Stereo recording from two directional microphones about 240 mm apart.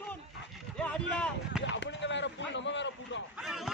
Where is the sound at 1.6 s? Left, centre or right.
Left.